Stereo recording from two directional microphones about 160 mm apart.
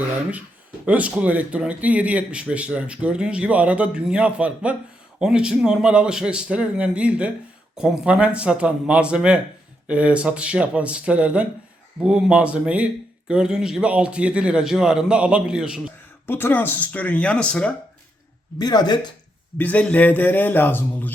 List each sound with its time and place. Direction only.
0.9 s speech: 10° right (ahead or behind)
16.2 s speech: 10° left (ahead or behind)
18.6 s speech: 25° left (ahead or behind)
19.5 s speech: 10° left (ahead or behind)